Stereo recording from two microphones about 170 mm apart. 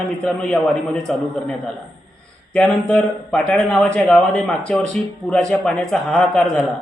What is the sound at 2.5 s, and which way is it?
A man's voice, 5° left (ahead or behind).